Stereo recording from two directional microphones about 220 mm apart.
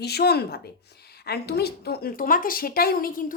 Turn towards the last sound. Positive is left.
turn(degrees=40)  # may be behind; listen again after turning